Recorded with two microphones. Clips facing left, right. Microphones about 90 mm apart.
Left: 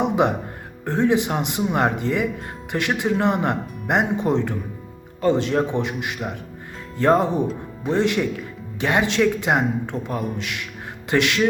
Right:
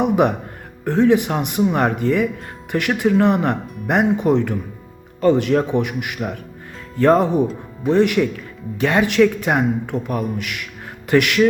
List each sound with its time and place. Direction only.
0.0 s speech: 20° left (ahead or behind)